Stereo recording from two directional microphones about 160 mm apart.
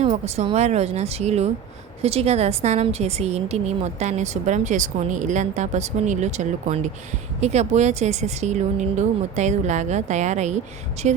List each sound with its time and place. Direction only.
0.0 s a woman's voice: 45° right (ahead or behind)